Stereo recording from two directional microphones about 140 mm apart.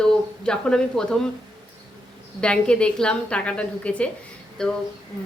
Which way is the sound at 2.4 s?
5° left (ahead or behind).